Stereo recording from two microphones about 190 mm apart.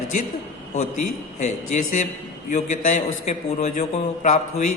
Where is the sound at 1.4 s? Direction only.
40° left (ahead or behind).